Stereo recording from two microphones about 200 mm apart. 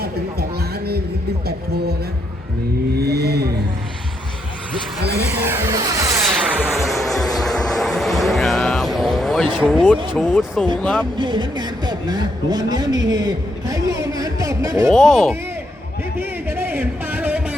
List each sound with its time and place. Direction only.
2.9 s vehicle: 55° right (ahead or behind)
4.9 s speech: 55° right (ahead or behind)
5.3 s music: 10° right (ahead or behind)
10.2 s speech: centre (ahead or behind)
11.2 s speech: 25° right (ahead or behind)
14.8 s speech: centre (ahead or behind)
16.5 s a sound: 10° right (ahead or behind)